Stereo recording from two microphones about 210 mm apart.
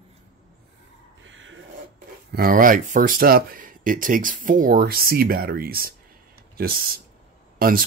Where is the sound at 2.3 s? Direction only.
45° right (ahead or behind).